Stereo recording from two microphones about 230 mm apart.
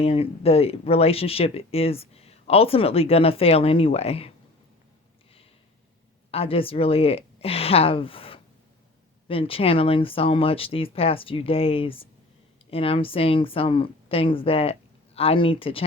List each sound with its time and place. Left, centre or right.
0.0 s speech: left
6.3 s speech: left